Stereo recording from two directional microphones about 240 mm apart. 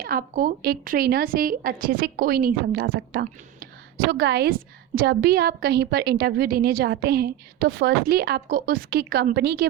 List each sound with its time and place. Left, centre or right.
0.0 s a woman's voice: right